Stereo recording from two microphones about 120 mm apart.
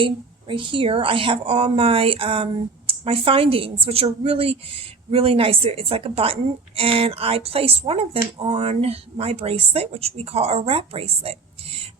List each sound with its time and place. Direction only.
0.0 s speech: 45° right (ahead or behind)